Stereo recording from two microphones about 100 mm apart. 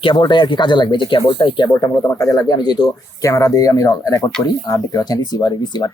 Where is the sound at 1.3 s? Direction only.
65° left (ahead or behind).